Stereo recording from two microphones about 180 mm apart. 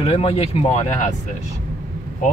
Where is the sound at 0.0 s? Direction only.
35° left (ahead or behind).